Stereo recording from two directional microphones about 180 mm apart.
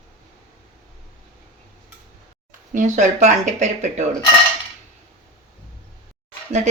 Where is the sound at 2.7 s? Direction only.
45° right (ahead or behind).